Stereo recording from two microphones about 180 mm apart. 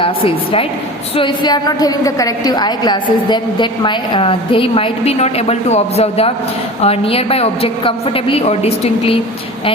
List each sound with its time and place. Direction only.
0.0 s a woman's voice: 30° left (ahead or behind)